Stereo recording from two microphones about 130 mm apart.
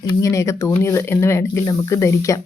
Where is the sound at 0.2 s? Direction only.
25° left (ahead or behind).